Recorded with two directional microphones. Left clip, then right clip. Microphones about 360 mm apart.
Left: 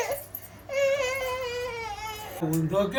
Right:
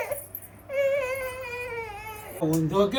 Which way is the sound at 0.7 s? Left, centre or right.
Left.